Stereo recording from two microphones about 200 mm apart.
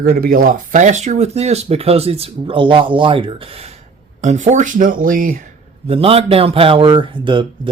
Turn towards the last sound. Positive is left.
turn(degrees=-25)  # may be behind; listen again after turning